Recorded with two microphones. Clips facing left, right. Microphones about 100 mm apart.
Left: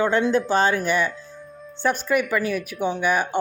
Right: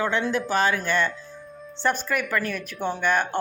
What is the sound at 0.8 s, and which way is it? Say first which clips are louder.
Speech: left 2 dB; 15° left (ahead or behind).